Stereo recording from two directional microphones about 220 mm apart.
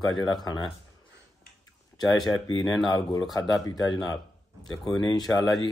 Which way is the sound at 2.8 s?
20° left (ahead or behind).